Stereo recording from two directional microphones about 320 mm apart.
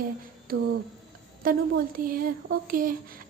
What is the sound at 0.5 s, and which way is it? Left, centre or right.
A woman's voice, right.